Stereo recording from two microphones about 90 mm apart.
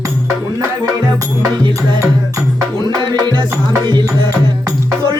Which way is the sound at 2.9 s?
45° right (ahead or behind).